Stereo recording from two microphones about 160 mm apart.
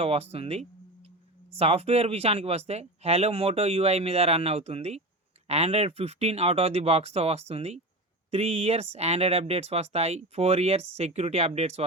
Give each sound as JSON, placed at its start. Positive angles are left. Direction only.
{"t": 0.0, "sound": "speech", "side_deg": -40}